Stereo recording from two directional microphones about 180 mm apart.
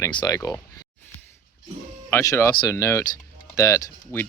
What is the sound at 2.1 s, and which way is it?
Speech, 15° left (ahead or behind).